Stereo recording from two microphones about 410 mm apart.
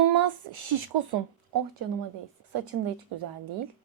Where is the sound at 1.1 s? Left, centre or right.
Right.